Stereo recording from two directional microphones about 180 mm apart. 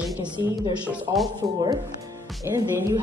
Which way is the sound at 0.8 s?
5° right (ahead or behind).